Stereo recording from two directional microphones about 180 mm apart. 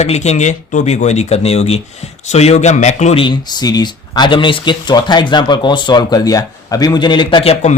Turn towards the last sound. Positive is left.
turn(degrees=35)  # may be behind; listen again after turning